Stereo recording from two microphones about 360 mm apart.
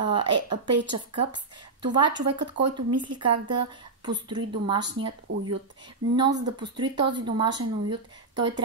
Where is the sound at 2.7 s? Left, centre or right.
Right.